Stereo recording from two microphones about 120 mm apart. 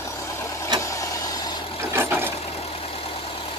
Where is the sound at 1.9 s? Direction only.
20° right (ahead or behind).